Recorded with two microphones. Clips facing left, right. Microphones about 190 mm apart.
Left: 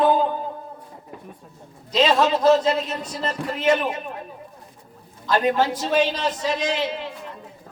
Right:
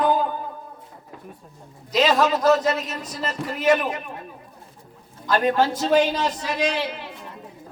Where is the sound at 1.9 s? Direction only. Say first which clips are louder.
Left 1 dB; 30° left (ahead or behind).